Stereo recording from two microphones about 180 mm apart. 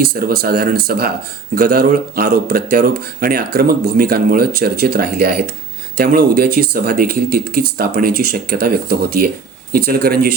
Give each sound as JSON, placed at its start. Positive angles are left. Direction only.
{"t": 0.0, "sound": "speech", "side_deg": -55}